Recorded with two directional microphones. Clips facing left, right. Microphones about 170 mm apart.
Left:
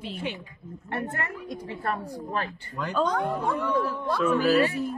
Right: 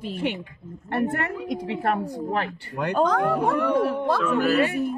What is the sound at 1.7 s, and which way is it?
Speech, 70° right (ahead or behind).